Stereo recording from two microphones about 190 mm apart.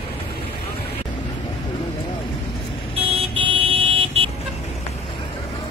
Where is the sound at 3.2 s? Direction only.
30° right (ahead or behind).